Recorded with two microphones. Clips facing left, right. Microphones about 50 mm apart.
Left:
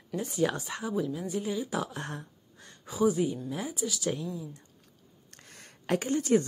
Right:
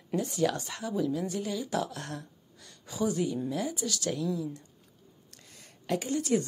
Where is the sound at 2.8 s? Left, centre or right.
Centre.